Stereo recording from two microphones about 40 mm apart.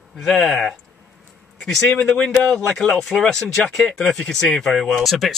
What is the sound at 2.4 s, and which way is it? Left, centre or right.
Speech, centre.